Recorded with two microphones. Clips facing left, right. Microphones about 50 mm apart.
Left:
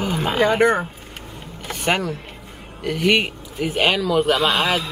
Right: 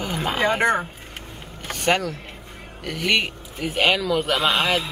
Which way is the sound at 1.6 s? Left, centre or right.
Centre.